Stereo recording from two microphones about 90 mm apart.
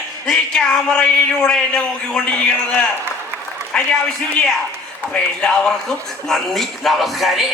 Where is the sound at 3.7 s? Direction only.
10° left (ahead or behind).